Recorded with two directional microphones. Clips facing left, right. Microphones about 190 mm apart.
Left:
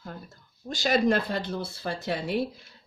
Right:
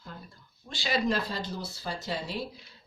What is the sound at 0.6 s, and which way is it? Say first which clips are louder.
Speech: left 6 dB; 45° left (ahead or behind).